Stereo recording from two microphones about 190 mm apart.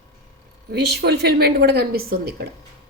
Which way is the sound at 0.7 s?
60° right (ahead or behind).